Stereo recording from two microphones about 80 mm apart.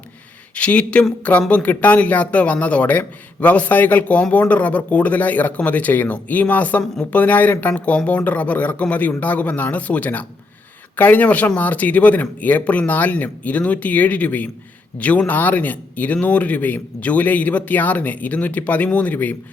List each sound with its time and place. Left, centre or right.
0.5 s a man's voice: centre